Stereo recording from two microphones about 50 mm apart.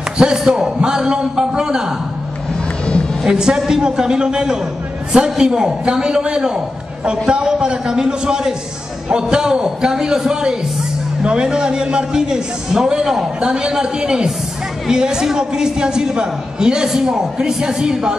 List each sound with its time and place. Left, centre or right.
0.2 s a man's voice: centre
3.3 s a man's voice: centre